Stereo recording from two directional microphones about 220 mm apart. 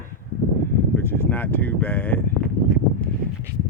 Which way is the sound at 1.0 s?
10° left (ahead or behind).